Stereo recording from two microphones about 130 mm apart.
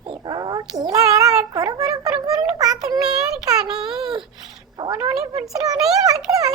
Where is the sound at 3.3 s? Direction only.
5° right (ahead or behind).